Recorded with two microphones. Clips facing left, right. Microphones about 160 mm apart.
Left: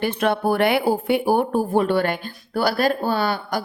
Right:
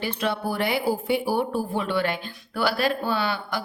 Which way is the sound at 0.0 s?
55° left (ahead or behind).